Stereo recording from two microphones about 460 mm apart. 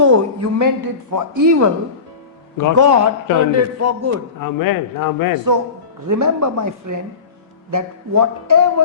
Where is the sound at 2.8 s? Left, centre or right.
Right.